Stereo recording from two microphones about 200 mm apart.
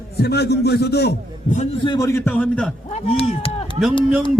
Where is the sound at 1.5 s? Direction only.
25° left (ahead or behind).